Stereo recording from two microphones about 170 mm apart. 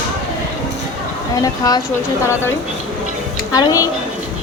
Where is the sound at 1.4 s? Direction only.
20° left (ahead or behind).